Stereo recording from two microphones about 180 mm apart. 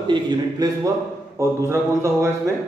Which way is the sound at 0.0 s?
25° right (ahead or behind).